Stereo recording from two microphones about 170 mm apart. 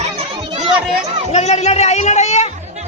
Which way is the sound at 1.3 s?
40° left (ahead or behind).